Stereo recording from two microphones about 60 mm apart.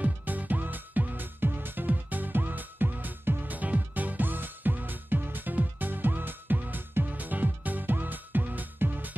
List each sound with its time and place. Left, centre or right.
0.0 s music: right